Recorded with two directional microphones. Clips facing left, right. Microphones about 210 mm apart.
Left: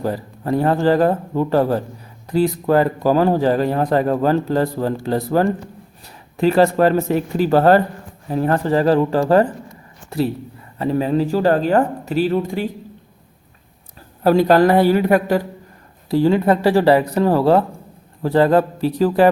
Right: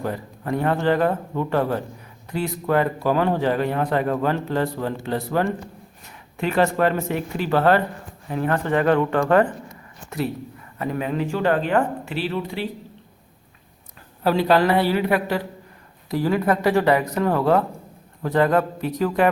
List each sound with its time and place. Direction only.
0.0 s a man's voice: 35° left (ahead or behind)
14.3 s a woman's voice: 45° left (ahead or behind)
16.0 s a man's voice: 25° left (ahead or behind)